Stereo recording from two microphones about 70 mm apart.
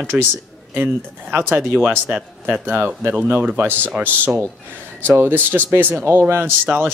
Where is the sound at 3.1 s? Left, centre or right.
Centre.